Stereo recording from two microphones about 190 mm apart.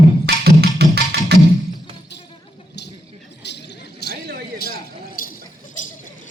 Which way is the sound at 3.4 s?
60° left (ahead or behind).